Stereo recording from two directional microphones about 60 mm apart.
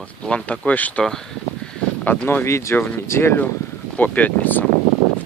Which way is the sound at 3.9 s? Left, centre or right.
Left.